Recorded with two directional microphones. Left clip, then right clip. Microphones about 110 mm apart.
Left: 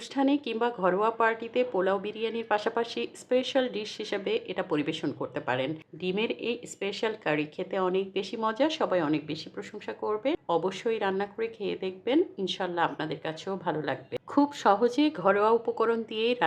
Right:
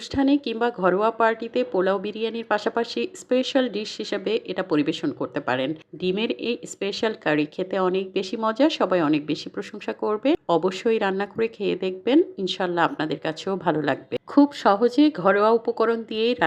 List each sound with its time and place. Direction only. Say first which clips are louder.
0.1 s a woman's voice: right 5 dB; 30° right (ahead or behind); by 14.0 s 55° right (ahead or behind)
14.3 s speech: right 5 dB; 30° right (ahead or behind)